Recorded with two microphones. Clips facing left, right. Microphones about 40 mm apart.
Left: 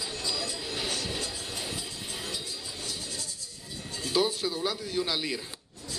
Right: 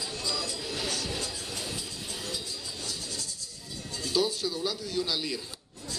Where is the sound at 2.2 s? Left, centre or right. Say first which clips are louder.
Even; left.